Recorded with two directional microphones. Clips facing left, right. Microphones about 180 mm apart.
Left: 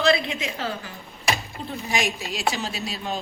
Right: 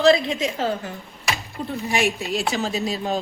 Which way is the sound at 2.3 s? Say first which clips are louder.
Right 4 dB; 50° right (ahead or behind).